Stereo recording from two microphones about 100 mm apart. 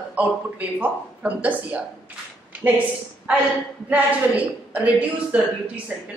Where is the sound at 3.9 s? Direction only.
15° right (ahead or behind).